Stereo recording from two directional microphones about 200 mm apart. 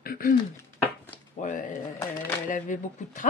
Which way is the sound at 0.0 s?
45° left (ahead or behind).